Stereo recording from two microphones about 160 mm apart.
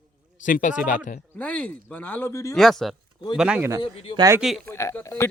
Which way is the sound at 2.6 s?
Centre (ahead or behind).